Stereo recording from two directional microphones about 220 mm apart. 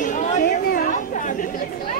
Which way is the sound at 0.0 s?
35° left (ahead or behind).